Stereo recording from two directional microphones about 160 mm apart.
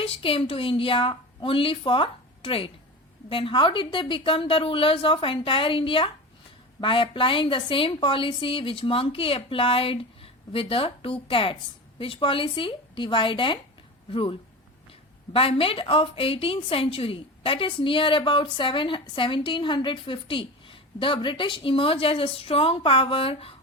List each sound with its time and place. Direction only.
0.0 s a woman's voice: 35° left (ahead or behind)